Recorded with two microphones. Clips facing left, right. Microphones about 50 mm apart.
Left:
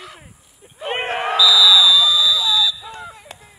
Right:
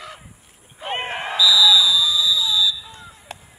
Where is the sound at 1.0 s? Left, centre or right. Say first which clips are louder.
Left 3 dB; left.